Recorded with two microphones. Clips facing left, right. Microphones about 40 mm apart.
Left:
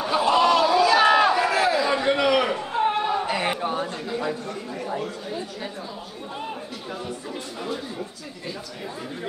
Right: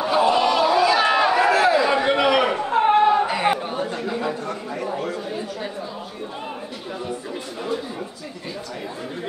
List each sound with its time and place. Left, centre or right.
0.0 s chatter: centre
0.9 s a sound: centre
2.5 s chatter: right
3.1 s chatter: centre
3.6 s chatter: centre
3.9 s a sound: centre